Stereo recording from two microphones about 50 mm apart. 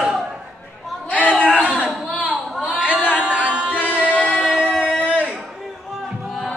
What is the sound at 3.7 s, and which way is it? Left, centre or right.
Music, left.